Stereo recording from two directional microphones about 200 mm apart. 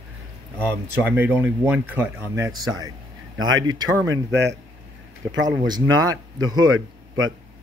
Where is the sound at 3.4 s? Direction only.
90° right.